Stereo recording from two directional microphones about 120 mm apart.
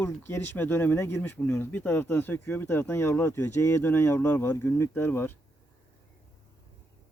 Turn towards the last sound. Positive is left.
turn(degrees=20)  # may be behind; listen again after turning